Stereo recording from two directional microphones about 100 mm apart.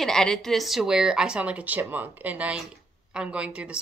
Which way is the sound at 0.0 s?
5° left (ahead or behind).